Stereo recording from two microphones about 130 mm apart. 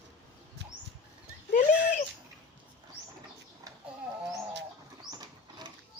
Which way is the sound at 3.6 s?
25° right (ahead or behind).